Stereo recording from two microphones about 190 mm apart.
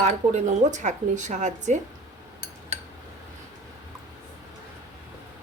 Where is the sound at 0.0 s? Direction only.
40° right (ahead or behind).